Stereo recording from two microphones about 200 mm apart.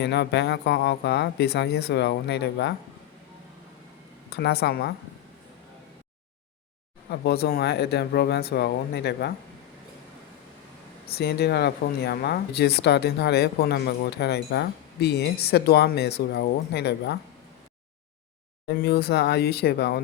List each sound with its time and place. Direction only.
0.0 s speech: 55° left (ahead or behind)
4.3 s speech: 55° left (ahead or behind)
7.1 s speech: 55° left (ahead or behind)
11.1 s speech: 55° left (ahead or behind)
18.7 s speech: 50° left (ahead or behind)